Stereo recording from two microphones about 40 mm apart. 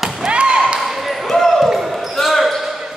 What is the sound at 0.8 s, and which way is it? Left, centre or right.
Basketball bounce, centre.